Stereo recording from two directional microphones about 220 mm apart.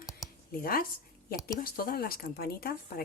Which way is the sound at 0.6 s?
40° left (ahead or behind).